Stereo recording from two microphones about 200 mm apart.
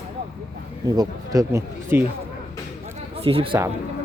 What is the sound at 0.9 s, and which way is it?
Speech, 20° right (ahead or behind).